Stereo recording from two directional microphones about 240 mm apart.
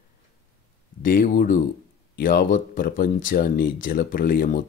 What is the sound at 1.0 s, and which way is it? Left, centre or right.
Speech, left.